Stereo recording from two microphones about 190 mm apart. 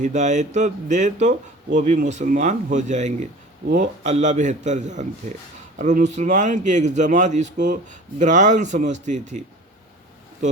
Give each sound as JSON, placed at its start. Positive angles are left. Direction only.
{"t": 0.0, "sound": "speech", "side_deg": -40}